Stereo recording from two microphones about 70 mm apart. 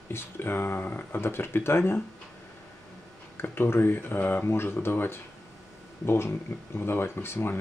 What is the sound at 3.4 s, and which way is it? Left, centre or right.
Speech, left.